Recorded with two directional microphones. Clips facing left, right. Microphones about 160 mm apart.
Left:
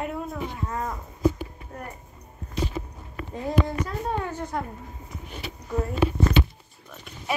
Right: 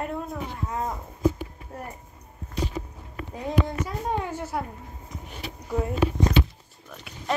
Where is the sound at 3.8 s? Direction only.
10° right (ahead or behind).